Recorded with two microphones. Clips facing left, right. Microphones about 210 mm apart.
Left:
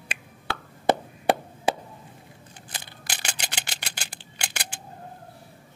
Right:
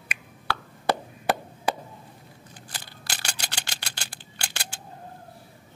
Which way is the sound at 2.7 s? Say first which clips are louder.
Left 1 dB; 20° left (ahead or behind).